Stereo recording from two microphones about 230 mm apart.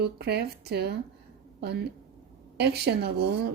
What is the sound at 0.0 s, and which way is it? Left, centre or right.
Speech, right.